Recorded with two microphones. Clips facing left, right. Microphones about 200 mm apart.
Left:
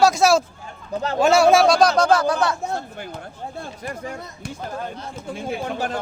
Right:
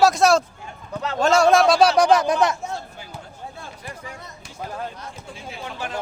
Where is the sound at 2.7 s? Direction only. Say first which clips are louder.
Left 4 dB; 55° left (ahead or behind).